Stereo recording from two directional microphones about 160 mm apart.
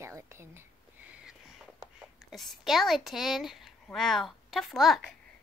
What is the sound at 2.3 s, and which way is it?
Speech, centre (ahead or behind).